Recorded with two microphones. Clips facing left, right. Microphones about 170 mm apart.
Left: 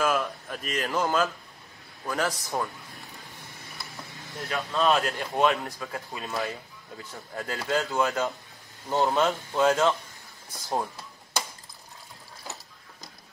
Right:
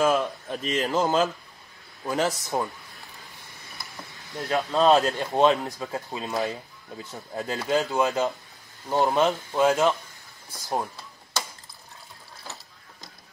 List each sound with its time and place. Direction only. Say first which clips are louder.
0.0 s speech: right 4 dB; 25° right (ahead or behind)
4.5 s speech: right 5 dB; 30° right (ahead or behind); by 9.9 s 15° right (ahead or behind)